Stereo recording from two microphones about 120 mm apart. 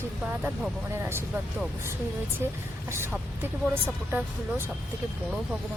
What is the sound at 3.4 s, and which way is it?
Speech, 15° right (ahead or behind).